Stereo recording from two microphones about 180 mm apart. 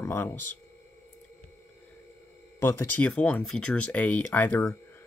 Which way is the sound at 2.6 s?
10° left (ahead or behind).